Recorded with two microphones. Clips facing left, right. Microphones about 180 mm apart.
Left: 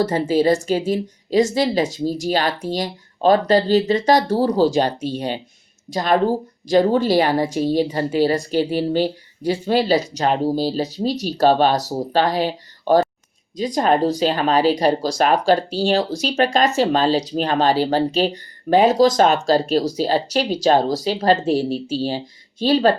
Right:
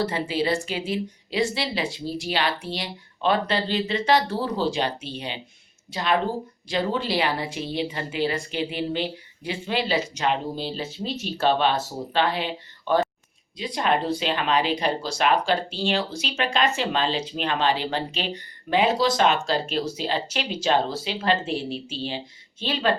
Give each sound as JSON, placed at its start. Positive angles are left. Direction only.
{"t": 0.0, "sound": "a woman's voice", "side_deg": 40}